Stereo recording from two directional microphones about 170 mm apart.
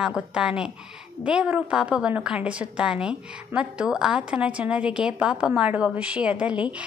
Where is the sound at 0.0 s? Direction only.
5° right (ahead or behind).